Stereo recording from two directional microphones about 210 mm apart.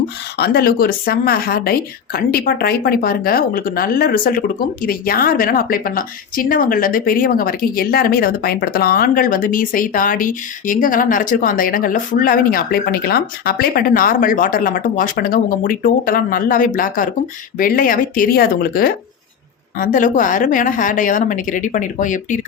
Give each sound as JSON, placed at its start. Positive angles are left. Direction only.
{"t": 0.3, "sound": "a woman's voice", "side_deg": 50}